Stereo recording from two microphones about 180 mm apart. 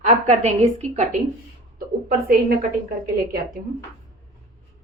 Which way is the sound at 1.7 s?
55° right (ahead or behind).